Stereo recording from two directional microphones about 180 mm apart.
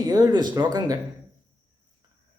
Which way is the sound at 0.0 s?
25° right (ahead or behind).